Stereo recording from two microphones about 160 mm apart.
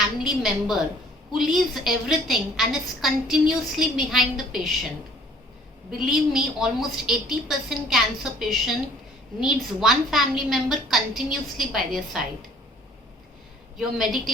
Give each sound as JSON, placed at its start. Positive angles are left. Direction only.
{"t": 0.0, "sound": "a woman's voice", "side_deg": -5}
{"t": 6.1, "sound": "a woman's voice", "side_deg": -5}
{"t": 9.8, "sound": "a woman's voice", "side_deg": 0}
{"t": 13.7, "sound": "a woman's voice", "side_deg": 0}